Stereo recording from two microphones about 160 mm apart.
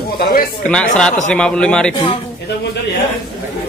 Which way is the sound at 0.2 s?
65° left (ahead or behind).